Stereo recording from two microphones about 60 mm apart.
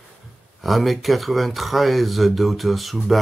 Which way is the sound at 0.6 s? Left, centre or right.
Centre.